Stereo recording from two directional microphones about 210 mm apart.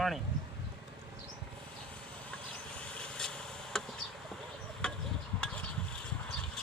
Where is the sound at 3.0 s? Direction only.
5° left (ahead or behind).